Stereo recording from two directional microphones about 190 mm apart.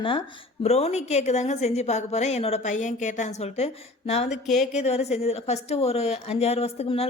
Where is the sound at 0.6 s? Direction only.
35° left (ahead or behind).